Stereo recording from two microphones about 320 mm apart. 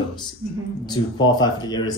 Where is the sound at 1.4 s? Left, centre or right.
Centre.